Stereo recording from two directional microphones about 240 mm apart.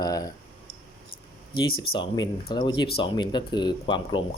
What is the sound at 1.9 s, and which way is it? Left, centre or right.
Speech, centre.